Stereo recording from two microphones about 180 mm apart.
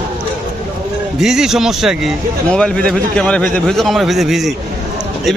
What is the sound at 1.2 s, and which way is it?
A man's voice, 5° right (ahead or behind).